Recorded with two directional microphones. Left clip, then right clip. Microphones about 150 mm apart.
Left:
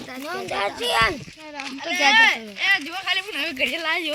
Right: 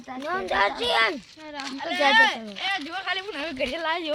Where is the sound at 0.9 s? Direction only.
50° left (ahead or behind).